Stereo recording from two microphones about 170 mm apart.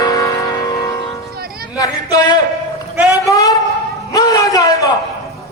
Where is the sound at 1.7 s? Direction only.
20° left (ahead or behind).